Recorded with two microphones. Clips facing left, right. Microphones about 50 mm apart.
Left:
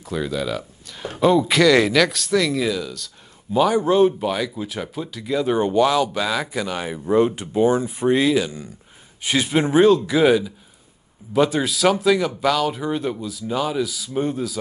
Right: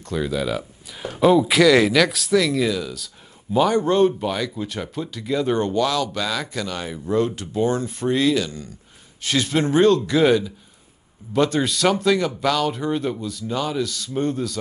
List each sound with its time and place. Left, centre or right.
0.0 s speech: centre
5.7 s speech: centre